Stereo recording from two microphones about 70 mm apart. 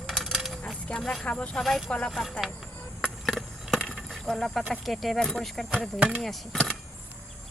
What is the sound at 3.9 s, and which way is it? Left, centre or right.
Insect, centre.